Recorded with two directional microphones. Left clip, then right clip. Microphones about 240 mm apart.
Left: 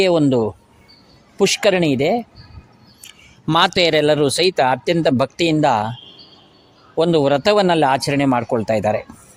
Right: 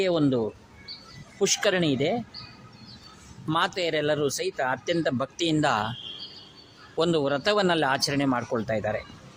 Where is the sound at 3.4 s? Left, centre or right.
Left.